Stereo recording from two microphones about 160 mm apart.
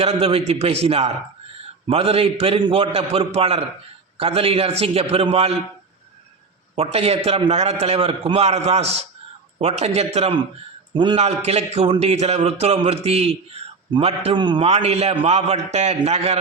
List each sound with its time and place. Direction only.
0.0 s a man's voice: 35° right (ahead or behind)
6.7 s a man's voice: 40° right (ahead or behind)